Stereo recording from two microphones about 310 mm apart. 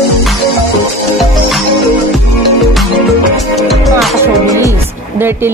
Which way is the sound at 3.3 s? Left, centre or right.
Centre.